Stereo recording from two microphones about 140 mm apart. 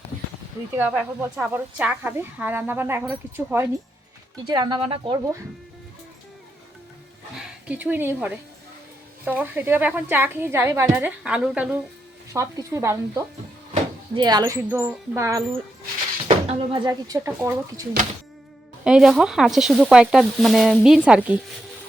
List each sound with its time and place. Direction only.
0.8 s speech: 10° right (ahead or behind)
4.4 s speech: 30° right (ahead or behind)
7.7 s speech: 10° right (ahead or behind)
12.3 s speech: 25° right (ahead or behind)
16.3 s a sound: 45° right (ahead or behind)
16.8 s speech: 25° right (ahead or behind)
18.9 s speech: 5° right (ahead or behind)